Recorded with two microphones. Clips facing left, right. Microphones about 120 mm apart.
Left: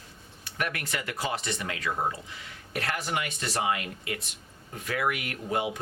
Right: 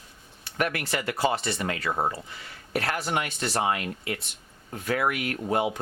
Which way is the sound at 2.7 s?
60° right (ahead or behind).